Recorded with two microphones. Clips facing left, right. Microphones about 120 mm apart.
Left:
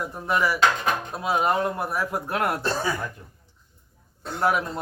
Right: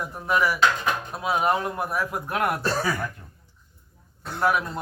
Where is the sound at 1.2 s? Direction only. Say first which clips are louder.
Even; 25° left (ahead or behind).